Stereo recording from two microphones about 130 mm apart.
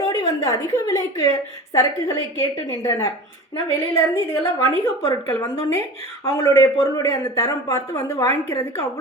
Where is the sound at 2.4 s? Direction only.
20° left (ahead or behind).